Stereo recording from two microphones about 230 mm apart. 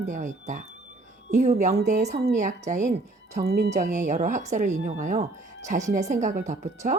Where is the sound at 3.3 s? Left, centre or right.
Right.